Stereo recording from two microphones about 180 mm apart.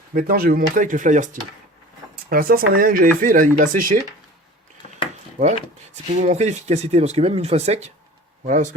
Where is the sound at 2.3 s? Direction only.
55° right (ahead or behind).